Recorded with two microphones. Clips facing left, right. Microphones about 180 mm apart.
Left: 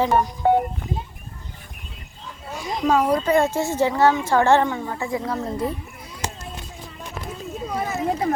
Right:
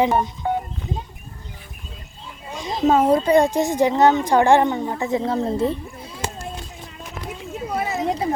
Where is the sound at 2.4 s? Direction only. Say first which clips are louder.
Right 3 dB; 20° right (ahead or behind).